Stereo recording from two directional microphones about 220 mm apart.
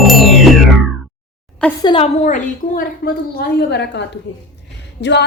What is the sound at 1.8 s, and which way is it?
A woman's voice, 25° left (ahead or behind).